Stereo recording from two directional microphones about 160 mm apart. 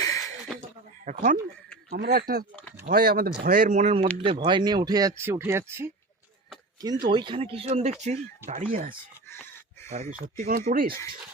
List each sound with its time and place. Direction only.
0.0 s a sound: 20° left (ahead or behind)
1.0 s speech: 55° right (ahead or behind)
1.9 s speech: 80° right; by 3.9 s 50° right (ahead or behind)
4.2 s speech: 30° right (ahead or behind); by 5.9 s 15° right (ahead or behind)
7.0 s speech: 30° right (ahead or behind); by 8.6 s 45° right (ahead or behind)
8.7 s speech: 60° right (ahead or behind)
9.9 s speech: 45° right (ahead or behind)
10.2 s speech: 65° right (ahead or behind)